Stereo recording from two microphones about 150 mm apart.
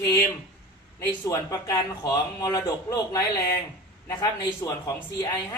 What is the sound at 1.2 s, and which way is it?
Speech, 25° left (ahead or behind).